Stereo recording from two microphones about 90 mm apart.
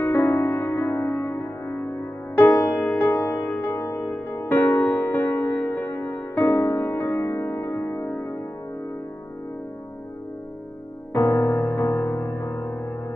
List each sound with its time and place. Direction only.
0.0 s music: 25° left (ahead or behind)
11.1 s music: 35° left (ahead or behind)
11.5 s music: 25° left (ahead or behind)